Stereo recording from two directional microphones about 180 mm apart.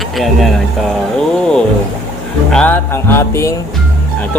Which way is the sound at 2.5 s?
10° left (ahead or behind).